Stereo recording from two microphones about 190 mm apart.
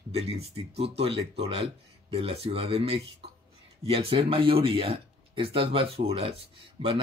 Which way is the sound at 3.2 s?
30° right (ahead or behind).